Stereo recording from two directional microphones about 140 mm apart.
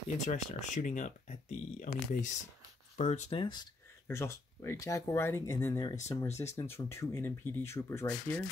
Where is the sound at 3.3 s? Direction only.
35° left (ahead or behind).